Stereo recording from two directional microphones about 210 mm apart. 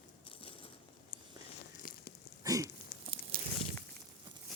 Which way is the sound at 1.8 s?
40° left (ahead or behind).